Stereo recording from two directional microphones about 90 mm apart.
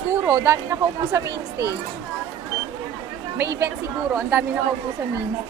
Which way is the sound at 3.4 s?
35° right (ahead or behind).